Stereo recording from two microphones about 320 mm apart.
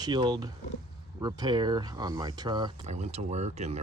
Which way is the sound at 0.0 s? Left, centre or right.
Centre.